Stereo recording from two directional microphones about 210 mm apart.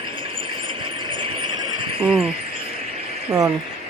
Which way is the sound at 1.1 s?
25° right (ahead or behind).